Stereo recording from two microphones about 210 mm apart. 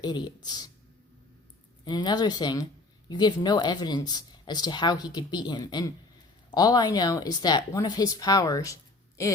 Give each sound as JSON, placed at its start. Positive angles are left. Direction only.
{"t": 0.0, "sound": "speech", "side_deg": 20}
{"t": 1.8, "sound": "speech", "side_deg": 20}